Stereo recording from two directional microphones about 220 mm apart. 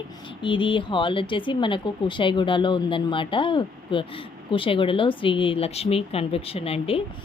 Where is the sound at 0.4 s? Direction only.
20° left (ahead or behind).